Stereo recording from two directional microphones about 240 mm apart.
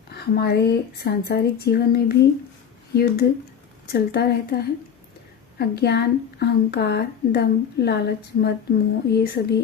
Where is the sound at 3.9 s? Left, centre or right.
Left.